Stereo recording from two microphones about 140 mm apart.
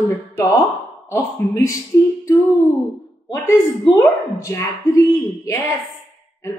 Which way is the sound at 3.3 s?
20° left (ahead or behind).